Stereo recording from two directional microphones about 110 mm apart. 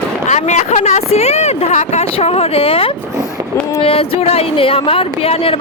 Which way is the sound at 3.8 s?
60° left (ahead or behind).